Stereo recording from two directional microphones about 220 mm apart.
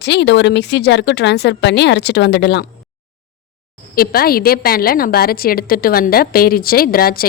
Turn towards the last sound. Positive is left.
turn(degrees=40)  # may be behind; listen again after turning